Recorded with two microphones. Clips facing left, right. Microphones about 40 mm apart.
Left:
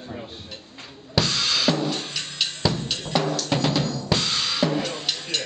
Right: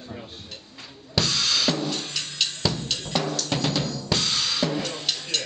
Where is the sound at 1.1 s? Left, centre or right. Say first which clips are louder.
Left 1 dB; centre.